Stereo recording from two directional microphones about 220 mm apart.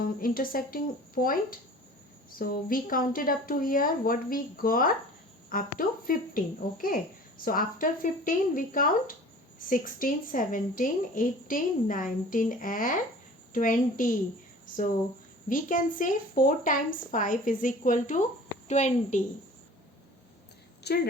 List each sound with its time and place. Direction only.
0.0 s a woman's voice: 40° left (ahead or behind)
15.4 s a woman's voice: 35° left (ahead or behind)
20.8 s a woman's voice: 45° left (ahead or behind)